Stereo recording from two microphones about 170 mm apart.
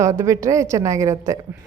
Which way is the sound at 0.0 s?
15° right (ahead or behind).